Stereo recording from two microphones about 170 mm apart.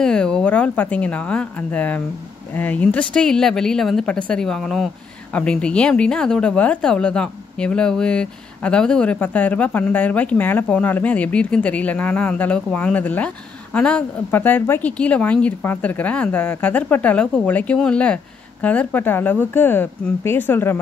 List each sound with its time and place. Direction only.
0.0 s speech: 5° left (ahead or behind)